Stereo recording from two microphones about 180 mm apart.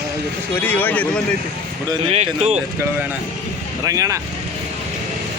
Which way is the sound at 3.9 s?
20° right (ahead or behind).